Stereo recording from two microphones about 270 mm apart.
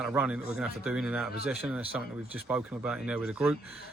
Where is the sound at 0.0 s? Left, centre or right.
Centre.